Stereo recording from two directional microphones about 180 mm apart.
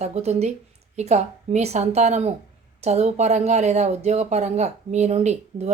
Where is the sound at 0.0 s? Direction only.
35° right (ahead or behind).